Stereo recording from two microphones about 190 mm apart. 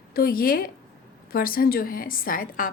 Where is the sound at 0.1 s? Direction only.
50° left (ahead or behind).